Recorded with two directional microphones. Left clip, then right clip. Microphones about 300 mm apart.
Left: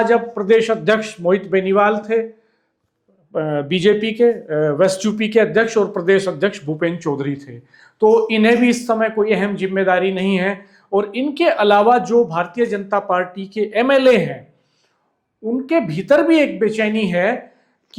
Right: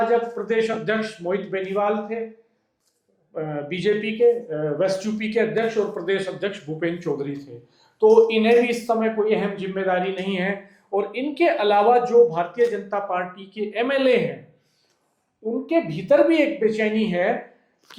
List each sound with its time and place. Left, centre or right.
0.4 s speech: left
3.3 s speech: left
15.6 s speech: left